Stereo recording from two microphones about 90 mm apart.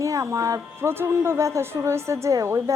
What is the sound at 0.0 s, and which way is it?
A woman's voice, 35° right (ahead or behind).